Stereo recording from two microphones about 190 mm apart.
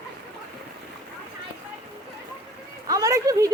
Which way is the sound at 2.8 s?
20° right (ahead or behind).